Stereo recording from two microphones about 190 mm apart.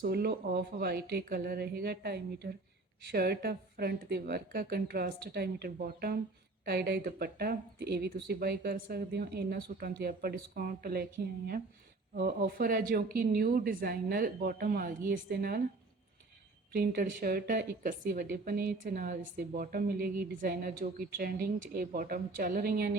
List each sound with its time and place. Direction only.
0.0 s a woman's voice: 55° right (ahead or behind)
16.7 s a woman's voice: 50° right (ahead or behind)